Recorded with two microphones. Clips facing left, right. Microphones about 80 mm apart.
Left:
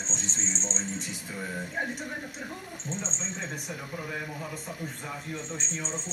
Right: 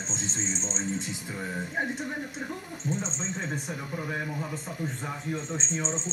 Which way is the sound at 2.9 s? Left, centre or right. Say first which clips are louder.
Right 4 dB; centre.